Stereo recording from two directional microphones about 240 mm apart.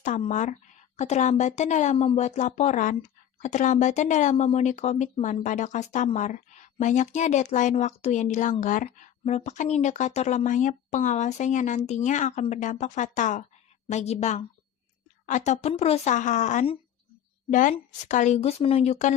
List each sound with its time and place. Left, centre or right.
0.0 s speech: left